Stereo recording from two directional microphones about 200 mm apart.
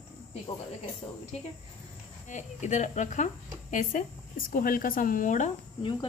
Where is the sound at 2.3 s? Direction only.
35° left (ahead or behind).